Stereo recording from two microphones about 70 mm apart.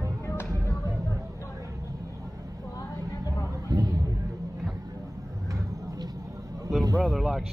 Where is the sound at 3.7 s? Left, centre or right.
Right.